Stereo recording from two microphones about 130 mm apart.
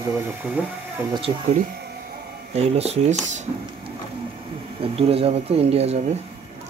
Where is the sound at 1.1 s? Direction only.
45° right (ahead or behind).